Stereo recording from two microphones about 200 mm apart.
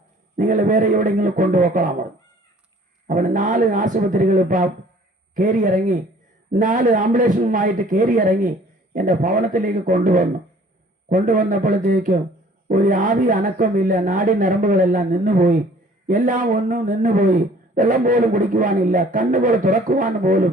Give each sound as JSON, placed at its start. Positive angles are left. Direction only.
{"t": 0.3, "sound": "a man's voice", "side_deg": -40}
{"t": 3.1, "sound": "a man's voice", "side_deg": -40}